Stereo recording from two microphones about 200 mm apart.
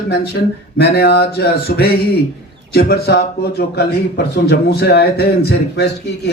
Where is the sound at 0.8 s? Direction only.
55° left (ahead or behind).